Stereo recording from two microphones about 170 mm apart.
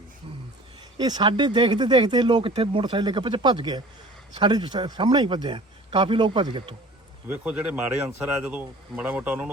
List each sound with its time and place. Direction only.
0.9 s speech: 25° right (ahead or behind)
7.3 s speech: 10° right (ahead or behind)